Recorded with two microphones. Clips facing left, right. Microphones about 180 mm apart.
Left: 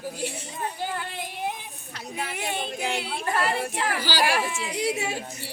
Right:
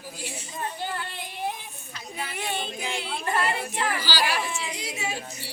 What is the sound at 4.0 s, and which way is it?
Speech, 55° left (ahead or behind).